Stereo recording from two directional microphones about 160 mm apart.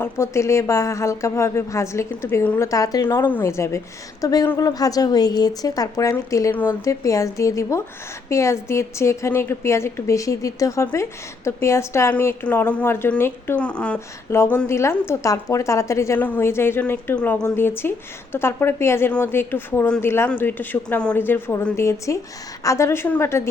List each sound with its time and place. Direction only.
0.0 s a woman's voice: 15° left (ahead or behind)